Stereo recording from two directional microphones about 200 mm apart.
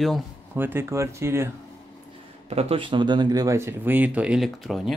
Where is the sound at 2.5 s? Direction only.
30° right (ahead or behind).